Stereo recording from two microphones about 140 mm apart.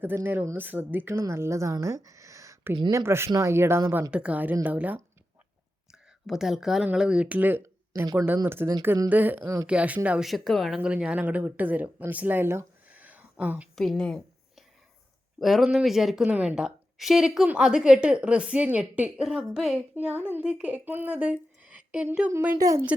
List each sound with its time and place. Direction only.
0.0 s a woman's voice: 15° right (ahead or behind)
13.7 s a sound: 5° left (ahead or behind)
15.4 s a woman's voice: centre (ahead or behind)
22.5 s a woman's voice: 25° right (ahead or behind)